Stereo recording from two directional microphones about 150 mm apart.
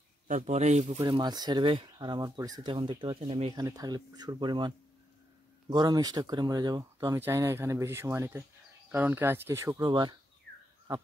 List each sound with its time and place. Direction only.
0.3 s speech: 50° right (ahead or behind)
1.0 s speech: 30° right (ahead or behind)
3.6 s speech: 25° right (ahead or behind)
9.8 s speech: 30° right (ahead or behind)